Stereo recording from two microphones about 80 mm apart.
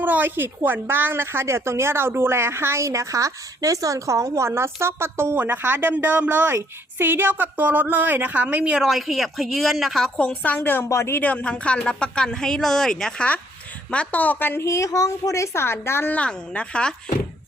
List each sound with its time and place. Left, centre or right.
0.0 s a woman's voice: right
8.8 s speech: centre
10.2 s a woman's voice: centre
10.8 s a woman's voice: left
11.2 s a woman's voice: centre
14.6 s a woman's voice: left
16.1 s speech: centre